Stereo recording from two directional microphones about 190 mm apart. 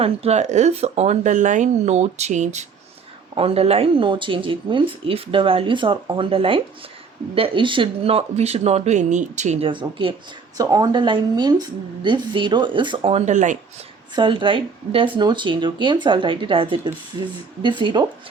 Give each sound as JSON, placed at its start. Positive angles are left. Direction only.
{"t": 0.0, "sound": "speech", "side_deg": -35}
{"t": 14.2, "sound": "speech", "side_deg": -25}